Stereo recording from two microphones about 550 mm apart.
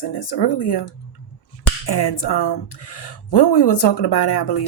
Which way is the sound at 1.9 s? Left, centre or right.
Left.